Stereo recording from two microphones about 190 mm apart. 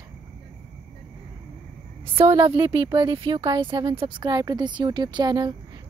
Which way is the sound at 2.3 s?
25° right (ahead or behind).